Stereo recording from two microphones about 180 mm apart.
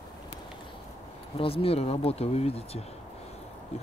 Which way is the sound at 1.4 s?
30° left (ahead or behind).